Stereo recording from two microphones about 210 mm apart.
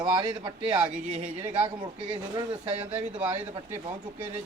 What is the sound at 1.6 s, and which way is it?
Speech, 20° right (ahead or behind).